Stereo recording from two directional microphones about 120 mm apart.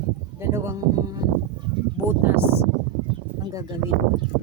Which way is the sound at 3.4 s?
30° right (ahead or behind).